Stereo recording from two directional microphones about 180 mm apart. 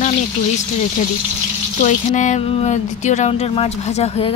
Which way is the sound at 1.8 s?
45° left (ahead or behind).